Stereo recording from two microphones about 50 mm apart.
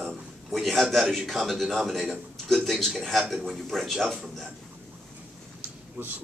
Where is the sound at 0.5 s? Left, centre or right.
Centre.